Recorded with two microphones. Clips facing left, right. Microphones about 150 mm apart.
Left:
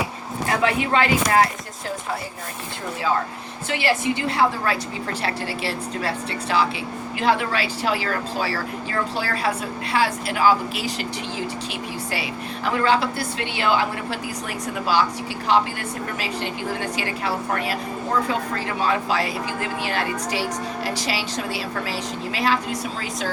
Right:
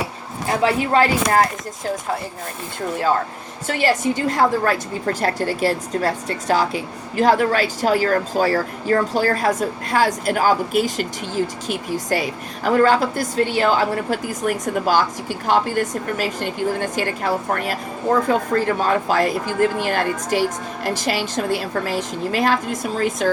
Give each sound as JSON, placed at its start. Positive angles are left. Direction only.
{"t": 0.6, "sound": "speech", "side_deg": -40}
{"t": 3.7, "sound": "a woman's voice", "side_deg": -45}